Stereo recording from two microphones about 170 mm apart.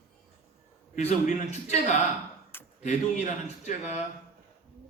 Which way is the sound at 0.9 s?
45° left (ahead or behind).